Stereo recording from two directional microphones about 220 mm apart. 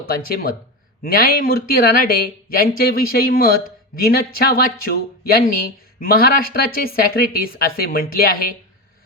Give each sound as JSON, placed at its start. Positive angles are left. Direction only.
{"t": 0.0, "sound": "a woman's voice", "side_deg": 40}